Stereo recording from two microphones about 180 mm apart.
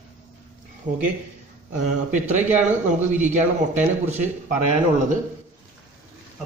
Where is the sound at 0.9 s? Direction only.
40° right (ahead or behind).